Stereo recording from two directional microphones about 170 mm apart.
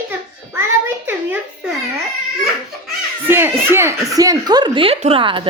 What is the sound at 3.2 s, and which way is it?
Speech, 15° right (ahead or behind).